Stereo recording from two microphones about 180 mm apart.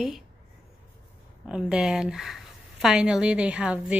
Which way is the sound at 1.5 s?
5° right (ahead or behind).